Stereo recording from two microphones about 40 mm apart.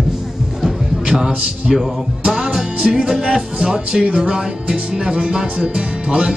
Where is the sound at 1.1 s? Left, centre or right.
Centre.